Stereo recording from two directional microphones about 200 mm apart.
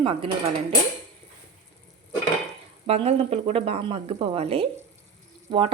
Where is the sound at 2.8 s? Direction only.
30° right (ahead or behind).